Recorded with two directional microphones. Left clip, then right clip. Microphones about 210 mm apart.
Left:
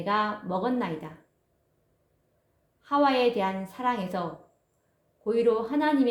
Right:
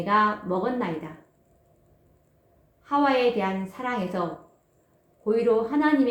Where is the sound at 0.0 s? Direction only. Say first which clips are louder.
Right 5 dB; 55° left (ahead or behind).